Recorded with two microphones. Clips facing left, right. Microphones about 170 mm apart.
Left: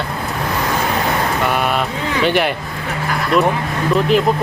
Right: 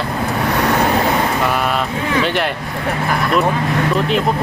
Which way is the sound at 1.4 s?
Centre (ahead or behind).